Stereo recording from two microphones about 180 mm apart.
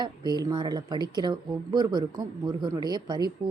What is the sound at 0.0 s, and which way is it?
A woman's voice, 25° right (ahead or behind).